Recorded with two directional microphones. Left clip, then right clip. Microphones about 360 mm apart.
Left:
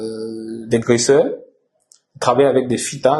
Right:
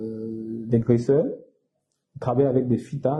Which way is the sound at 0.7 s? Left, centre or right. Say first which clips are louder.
Left 7 dB; centre.